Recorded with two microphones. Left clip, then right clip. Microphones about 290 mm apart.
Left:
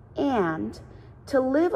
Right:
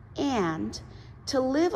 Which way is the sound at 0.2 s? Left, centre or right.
Centre.